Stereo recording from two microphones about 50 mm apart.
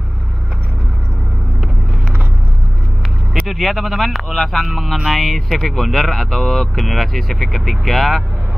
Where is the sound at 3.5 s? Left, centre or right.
Centre.